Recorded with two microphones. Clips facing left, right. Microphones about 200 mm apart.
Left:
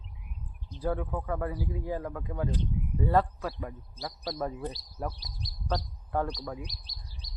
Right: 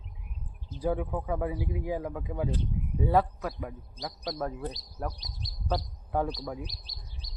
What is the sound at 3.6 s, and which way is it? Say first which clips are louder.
Speech: right 1 dB; centre (ahead or behind).